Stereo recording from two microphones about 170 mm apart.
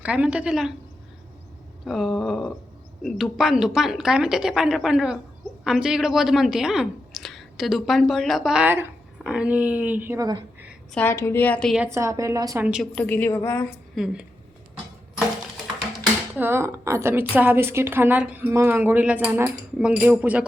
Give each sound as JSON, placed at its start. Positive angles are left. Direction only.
{"t": 0.0, "sound": "a woman's voice", "side_deg": -5}
{"t": 1.8, "sound": "a woman's voice", "side_deg": 0}
{"t": 10.9, "sound": "a woman's voice", "side_deg": 15}
{"t": 11.9, "sound": "a woman's voice", "side_deg": -20}
{"t": 12.6, "sound": "a woman's voice", "side_deg": 0}
{"t": 13.9, "sound": "a woman's voice", "side_deg": -5}
{"t": 16.3, "sound": "a woman's voice", "side_deg": -15}